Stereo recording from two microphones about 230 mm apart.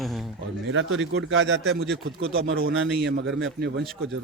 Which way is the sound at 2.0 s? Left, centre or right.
Right.